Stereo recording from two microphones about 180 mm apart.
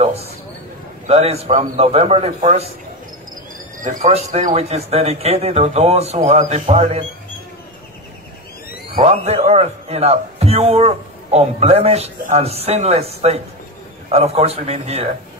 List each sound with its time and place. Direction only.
0.0 s a man's voice: 35° right (ahead or behind)
3.8 s a man's voice: 40° right (ahead or behind)
8.9 s a man's voice: 35° right (ahead or behind)